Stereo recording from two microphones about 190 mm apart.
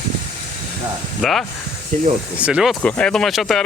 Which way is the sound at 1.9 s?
45° right (ahead or behind).